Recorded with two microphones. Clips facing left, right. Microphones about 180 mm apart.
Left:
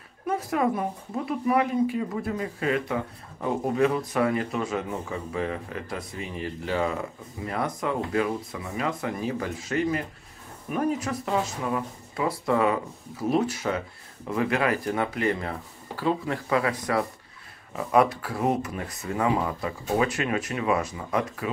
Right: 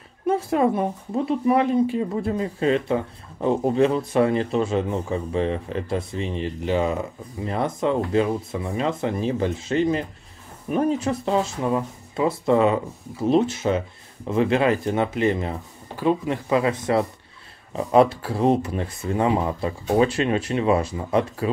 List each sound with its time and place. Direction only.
0.3 s speech: 30° right (ahead or behind)